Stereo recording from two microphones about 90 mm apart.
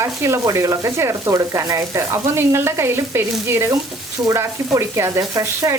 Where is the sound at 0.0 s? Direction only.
35° right (ahead or behind).